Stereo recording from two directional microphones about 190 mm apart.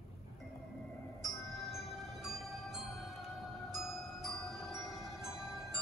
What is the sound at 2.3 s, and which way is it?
Music, centre (ahead or behind).